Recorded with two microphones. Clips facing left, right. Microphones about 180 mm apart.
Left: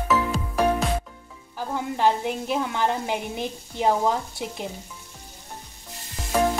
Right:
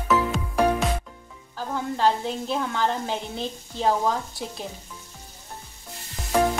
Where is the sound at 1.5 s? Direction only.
15° left (ahead or behind).